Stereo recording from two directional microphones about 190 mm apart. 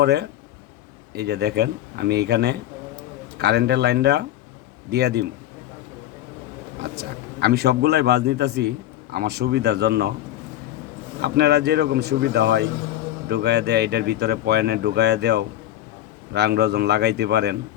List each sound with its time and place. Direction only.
0.0 s speech: 60° right (ahead or behind)
6.8 s speech: 60° right (ahead or behind)
11.2 s speech: 60° right (ahead or behind)